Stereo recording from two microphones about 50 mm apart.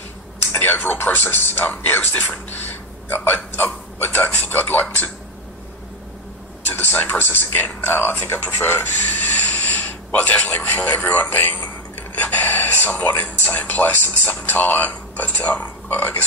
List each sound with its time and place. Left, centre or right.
0.6 s speech: left
6.7 s speech: left
9.1 s a man's voice: left